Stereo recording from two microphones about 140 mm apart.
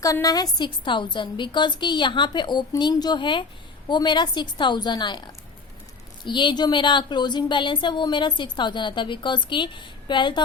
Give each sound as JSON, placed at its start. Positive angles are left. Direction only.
{"t": 0.0, "sound": "speech", "side_deg": 25}